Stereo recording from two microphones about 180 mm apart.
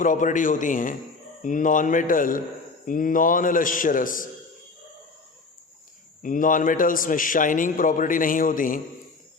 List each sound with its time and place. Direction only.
0.0 s a man's voice: 45° left (ahead or behind)
6.2 s a man's voice: 45° left (ahead or behind)